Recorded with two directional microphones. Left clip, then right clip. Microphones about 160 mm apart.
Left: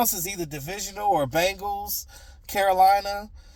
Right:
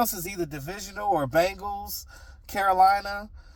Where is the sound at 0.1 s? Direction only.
20° left (ahead or behind).